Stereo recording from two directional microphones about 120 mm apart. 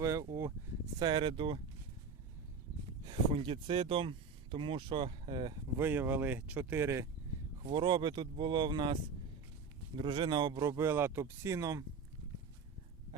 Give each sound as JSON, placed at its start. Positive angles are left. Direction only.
{"t": 0.0, "sound": "speech", "side_deg": -25}
{"t": 0.9, "sound": "speech", "side_deg": -35}
{"t": 3.0, "sound": "speech", "side_deg": -40}
{"t": 5.7, "sound": "speech", "side_deg": -15}
{"t": 7.6, "sound": "speech", "side_deg": -40}